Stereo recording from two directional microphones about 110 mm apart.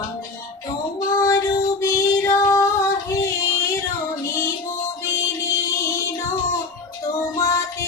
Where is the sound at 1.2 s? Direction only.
35° left (ahead or behind).